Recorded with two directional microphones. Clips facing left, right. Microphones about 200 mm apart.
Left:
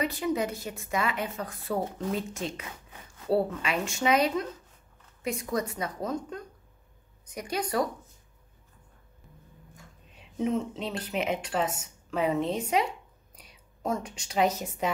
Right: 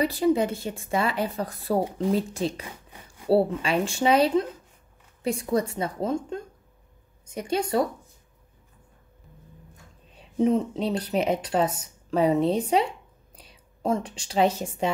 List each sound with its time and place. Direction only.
0.0 s speech: 35° right (ahead or behind)
1.9 s speech: 15° right (ahead or behind)
2.1 s a woman's voice: 35° right (ahead or behind)
10.1 s a woman's voice: 35° right (ahead or behind)